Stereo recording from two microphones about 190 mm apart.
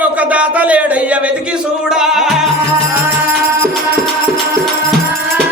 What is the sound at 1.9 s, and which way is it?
Music, centre (ahead or behind).